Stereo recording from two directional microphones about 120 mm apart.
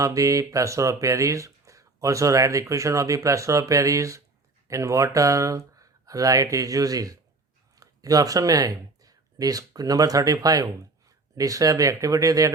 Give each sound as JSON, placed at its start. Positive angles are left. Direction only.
{"t": 0.0, "sound": "speech", "side_deg": -25}